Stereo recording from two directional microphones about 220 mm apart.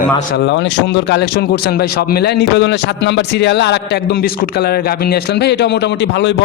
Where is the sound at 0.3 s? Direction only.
50° left (ahead or behind).